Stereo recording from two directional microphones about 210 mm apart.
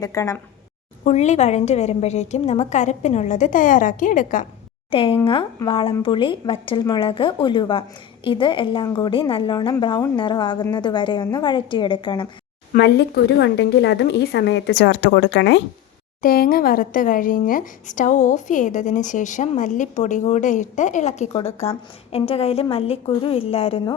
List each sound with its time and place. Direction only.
0.0 s a woman's voice: 15° left (ahead or behind)
1.0 s speech: 35° left (ahead or behind)
4.9 s a woman's voice: 25° left (ahead or behind)
12.7 s a woman's voice: 50° left (ahead or behind)
16.2 s a woman's voice: 45° left (ahead or behind); by 23.9 s 25° left (ahead or behind)